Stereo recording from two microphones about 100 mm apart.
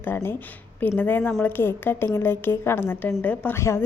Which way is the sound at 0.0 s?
20° left (ahead or behind).